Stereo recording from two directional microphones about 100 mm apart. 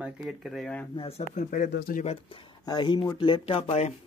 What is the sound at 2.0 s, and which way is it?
Speech, 60° left (ahead or behind).